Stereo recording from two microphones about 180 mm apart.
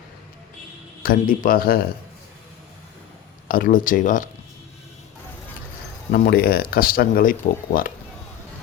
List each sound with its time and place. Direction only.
1.0 s speech: 50° left (ahead or behind)
3.5 s speech: 50° left (ahead or behind)
6.1 s speech: 60° left (ahead or behind)